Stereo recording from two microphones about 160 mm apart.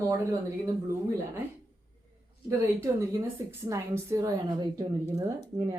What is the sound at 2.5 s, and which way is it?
A woman's voice, 20° right (ahead or behind).